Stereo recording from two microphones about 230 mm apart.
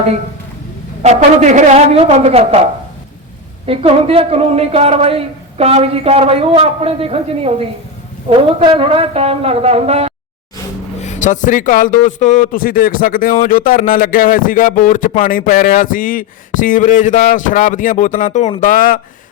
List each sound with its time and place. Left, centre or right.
1.0 s a woman's voice: right
3.7 s a woman's voice: right
11.0 s a man's voice: left